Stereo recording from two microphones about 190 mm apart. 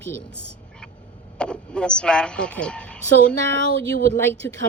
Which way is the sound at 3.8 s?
75° right (ahead or behind).